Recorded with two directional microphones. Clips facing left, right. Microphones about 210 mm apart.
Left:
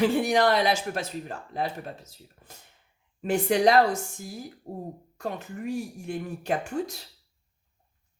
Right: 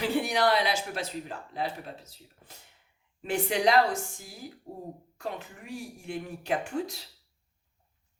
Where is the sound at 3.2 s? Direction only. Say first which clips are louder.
Left 4 dB; 45° left (ahead or behind).